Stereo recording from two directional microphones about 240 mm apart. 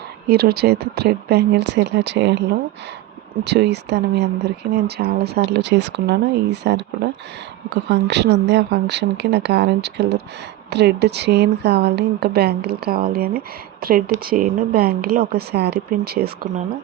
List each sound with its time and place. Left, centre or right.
0.3 s speech: right
3.4 s speech: right